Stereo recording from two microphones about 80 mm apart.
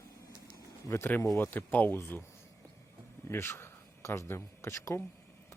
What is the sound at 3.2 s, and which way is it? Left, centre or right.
Speech, left.